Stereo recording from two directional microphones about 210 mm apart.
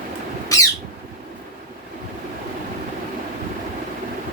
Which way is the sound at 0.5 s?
15° left (ahead or behind).